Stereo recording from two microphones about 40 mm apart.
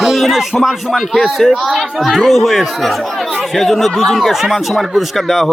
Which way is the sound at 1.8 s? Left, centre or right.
Centre.